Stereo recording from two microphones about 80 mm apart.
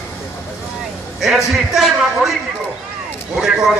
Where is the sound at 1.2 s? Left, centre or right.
Centre.